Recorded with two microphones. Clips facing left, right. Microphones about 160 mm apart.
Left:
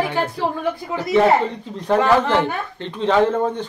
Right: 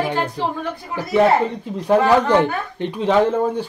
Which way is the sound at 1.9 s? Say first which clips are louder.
Right 2 dB; 15° right (ahead or behind).